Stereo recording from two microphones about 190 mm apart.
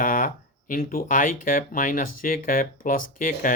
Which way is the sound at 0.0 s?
45° left (ahead or behind).